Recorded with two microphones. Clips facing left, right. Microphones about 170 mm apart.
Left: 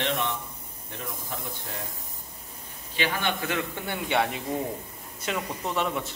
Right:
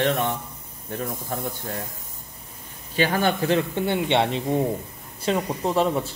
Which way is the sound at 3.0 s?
40° right (ahead or behind).